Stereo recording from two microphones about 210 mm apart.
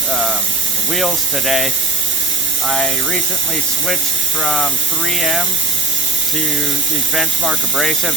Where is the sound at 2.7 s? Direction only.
Centre (ahead or behind).